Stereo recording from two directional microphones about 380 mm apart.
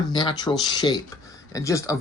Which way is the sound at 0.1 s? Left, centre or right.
Centre.